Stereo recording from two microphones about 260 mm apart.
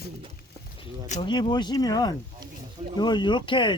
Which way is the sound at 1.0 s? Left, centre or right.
Left.